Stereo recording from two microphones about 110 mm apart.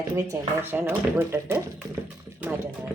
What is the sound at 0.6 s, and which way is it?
A woman's voice, 20° right (ahead or behind).